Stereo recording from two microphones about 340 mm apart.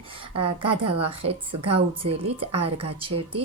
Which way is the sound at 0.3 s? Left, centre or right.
Centre.